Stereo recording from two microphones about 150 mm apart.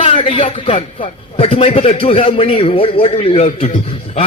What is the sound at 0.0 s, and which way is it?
A man's voice, 40° left (ahead or behind).